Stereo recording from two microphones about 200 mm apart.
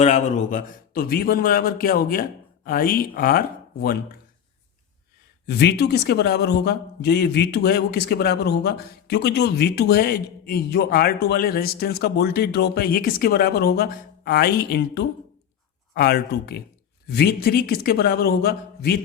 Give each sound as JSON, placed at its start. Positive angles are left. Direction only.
{"t": 0.0, "sound": "a man's voice", "side_deg": 35}
{"t": 5.5, "sound": "a man's voice", "side_deg": 55}